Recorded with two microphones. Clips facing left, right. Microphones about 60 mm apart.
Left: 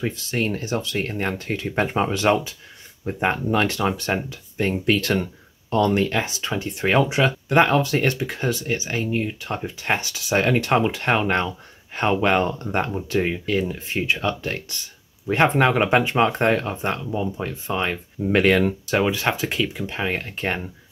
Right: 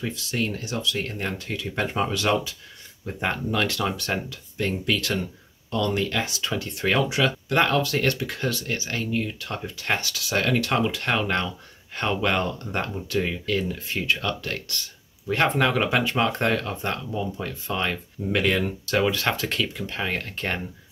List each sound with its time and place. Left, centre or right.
0.0 s speech: left; by 18.3 s centre
18.3 s speech: left
18.9 s speech: centre